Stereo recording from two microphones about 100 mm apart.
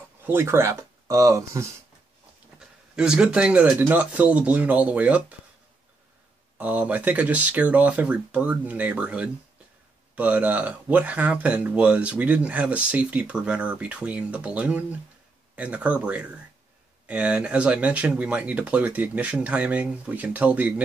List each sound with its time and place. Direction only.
0.3 s speech: 25° right (ahead or behind)
3.0 s speech: 10° right (ahead or behind)
6.6 s speech: 15° right (ahead or behind)